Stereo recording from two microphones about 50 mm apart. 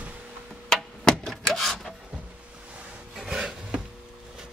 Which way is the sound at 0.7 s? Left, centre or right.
Centre.